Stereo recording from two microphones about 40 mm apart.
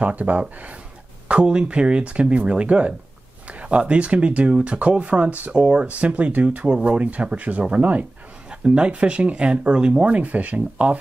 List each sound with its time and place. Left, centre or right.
0.0 s speech: right
1.3 s speech: right
6.6 s speech: right
8.5 s speech: right
10.0 s speech: right